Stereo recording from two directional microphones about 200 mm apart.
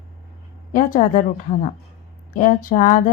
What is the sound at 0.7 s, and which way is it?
Speech, 40° left (ahead or behind).